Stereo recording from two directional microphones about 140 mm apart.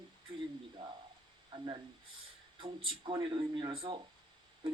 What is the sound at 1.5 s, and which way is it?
Speech, 35° right (ahead or behind).